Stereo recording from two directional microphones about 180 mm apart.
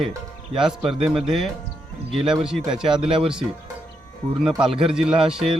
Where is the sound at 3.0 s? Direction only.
30° right (ahead or behind).